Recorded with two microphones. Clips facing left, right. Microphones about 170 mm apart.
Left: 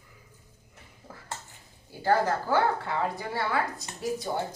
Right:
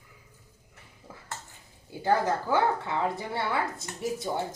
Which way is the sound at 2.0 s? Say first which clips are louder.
Left 1 dB; 20° right (ahead or behind).